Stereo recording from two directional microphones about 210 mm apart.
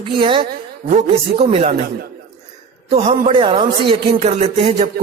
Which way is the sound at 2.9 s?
25° right (ahead or behind).